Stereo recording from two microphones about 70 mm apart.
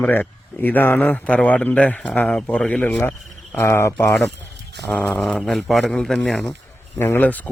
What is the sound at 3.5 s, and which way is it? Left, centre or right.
Speech, left.